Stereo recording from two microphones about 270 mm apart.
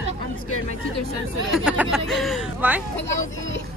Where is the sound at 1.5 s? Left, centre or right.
Centre.